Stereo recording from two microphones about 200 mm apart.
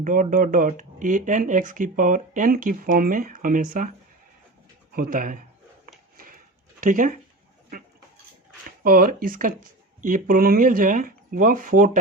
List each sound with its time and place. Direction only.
0.0 s speech: 40° right (ahead or behind)
4.9 s speech: 45° right (ahead or behind)
6.1 s a sound: 45° right (ahead or behind)
8.8 s speech: 45° right (ahead or behind)